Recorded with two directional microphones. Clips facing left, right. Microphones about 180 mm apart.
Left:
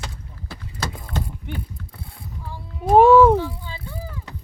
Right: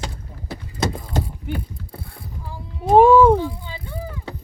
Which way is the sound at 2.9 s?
Centre (ahead or behind).